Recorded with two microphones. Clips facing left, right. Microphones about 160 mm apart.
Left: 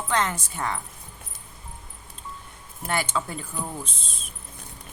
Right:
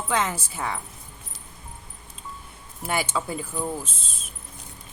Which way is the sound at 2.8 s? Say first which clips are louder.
Right 1 dB; 10° right (ahead or behind).